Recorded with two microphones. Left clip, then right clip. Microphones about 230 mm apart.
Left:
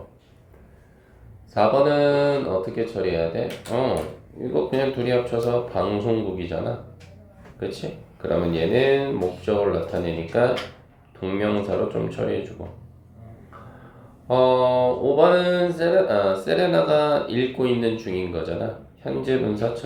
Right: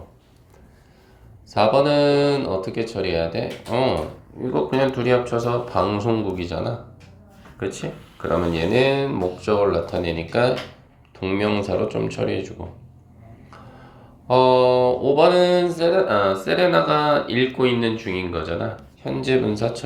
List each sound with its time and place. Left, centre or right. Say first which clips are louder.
1.5 s mantra: right 1 dB; right
7.8 s mantra: right 2 dB; right
14.3 s mantra: right 3 dB; right